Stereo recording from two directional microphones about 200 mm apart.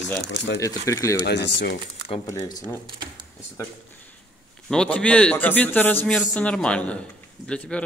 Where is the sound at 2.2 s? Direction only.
15° left (ahead or behind).